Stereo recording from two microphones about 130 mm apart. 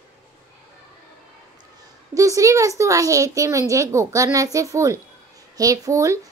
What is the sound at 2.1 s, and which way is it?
A child's voice, 25° right (ahead or behind).